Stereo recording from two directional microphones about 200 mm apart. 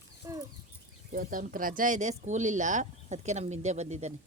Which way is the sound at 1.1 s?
45° right (ahead or behind).